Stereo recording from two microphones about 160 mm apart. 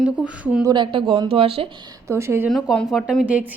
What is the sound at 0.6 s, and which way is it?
Speech, 30° right (ahead or behind).